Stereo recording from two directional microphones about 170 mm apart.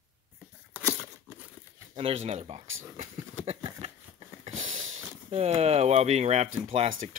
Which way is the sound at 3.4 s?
35° right (ahead or behind).